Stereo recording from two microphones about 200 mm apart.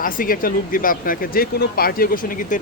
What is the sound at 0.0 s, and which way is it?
Speech, 45° left (ahead or behind).